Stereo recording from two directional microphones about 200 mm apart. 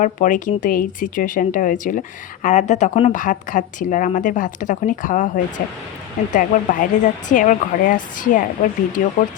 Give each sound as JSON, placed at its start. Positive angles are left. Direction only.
{"t": 0.0, "sound": "speech", "side_deg": 40}